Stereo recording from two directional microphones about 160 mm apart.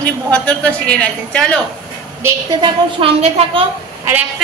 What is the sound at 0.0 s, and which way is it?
Speech, 5° left (ahead or behind).